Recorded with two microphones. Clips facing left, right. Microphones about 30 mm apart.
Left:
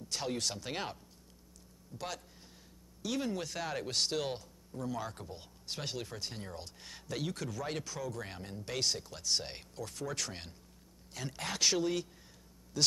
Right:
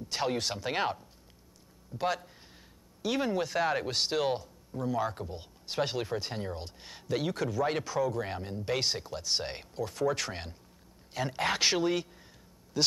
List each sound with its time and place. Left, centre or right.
0.1 s speech: right